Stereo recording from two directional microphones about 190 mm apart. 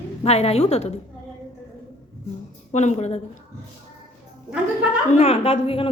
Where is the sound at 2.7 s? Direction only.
35° left (ahead or behind).